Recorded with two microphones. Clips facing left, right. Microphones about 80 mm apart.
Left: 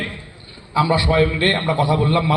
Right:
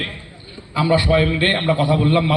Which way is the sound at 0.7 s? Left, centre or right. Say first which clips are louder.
Right 1 dB; centre.